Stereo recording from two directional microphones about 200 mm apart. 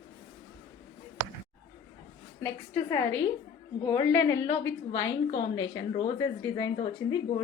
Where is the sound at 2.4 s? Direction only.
15° left (ahead or behind); by 7.0 s 30° left (ahead or behind).